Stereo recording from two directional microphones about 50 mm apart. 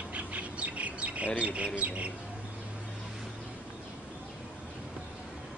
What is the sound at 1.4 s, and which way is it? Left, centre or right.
Speech, right.